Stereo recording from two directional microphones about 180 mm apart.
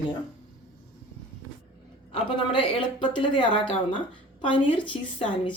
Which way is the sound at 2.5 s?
30° left (ahead or behind).